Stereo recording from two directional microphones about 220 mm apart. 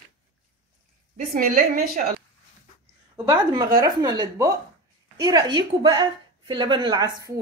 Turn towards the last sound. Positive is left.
turn(degrees=-15)  # may be behind; listen again after turning